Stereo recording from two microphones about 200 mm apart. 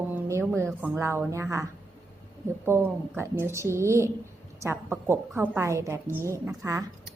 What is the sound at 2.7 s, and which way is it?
A woman's voice, 10° right (ahead or behind).